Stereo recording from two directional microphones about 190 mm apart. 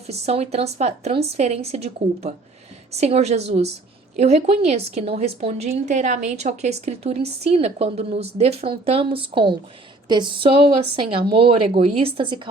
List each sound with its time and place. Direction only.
0.1 s a woman's voice: 35° right (ahead or behind)